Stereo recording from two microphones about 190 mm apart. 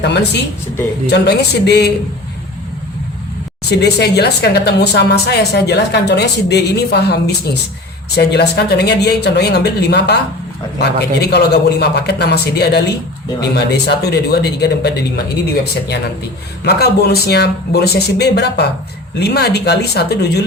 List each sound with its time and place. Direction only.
0.0 s a woman's voice: 65° left (ahead or behind)
3.7 s a woman's voice: 60° left (ahead or behind)
13.8 s a woman's voice: 60° left (ahead or behind)
16.6 s a woman's voice: 55° left (ahead or behind)